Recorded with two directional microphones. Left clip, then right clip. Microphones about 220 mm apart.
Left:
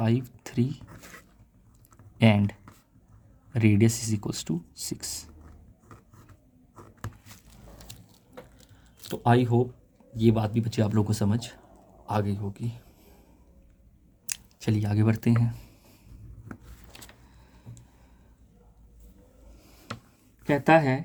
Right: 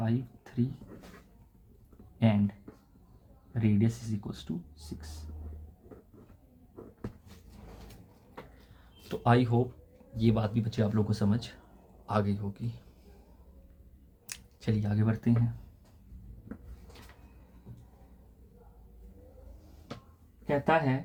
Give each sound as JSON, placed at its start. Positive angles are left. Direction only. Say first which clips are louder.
{"t": 0.0, "sound": "speech", "louder": "left 6 dB", "side_deg": 50}
{"t": 2.1, "sound": "speech", "louder": "left 6 dB", "side_deg": 50}
{"t": 9.0, "sound": "a man's voice", "louder": "left 3 dB", "side_deg": 30}
{"t": 14.3, "sound": "speech", "louder": "left 5 dB", "side_deg": 35}
{"t": 20.4, "sound": "speech", "louder": "left 6 dB", "side_deg": 55}